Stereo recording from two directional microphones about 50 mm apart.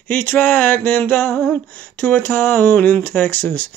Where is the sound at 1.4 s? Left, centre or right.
Left.